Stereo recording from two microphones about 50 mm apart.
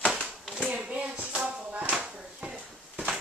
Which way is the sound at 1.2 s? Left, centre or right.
Centre.